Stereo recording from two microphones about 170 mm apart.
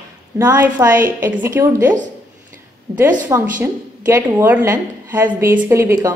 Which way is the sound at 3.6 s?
15° right (ahead or behind).